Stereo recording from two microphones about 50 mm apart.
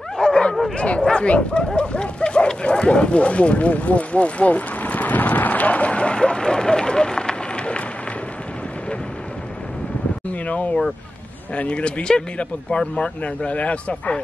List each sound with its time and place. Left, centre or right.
0.2 s bow-wow: centre
0.7 s speech: left
10.4 s speech: left